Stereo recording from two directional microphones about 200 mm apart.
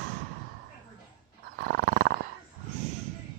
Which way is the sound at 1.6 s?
50° right (ahead or behind).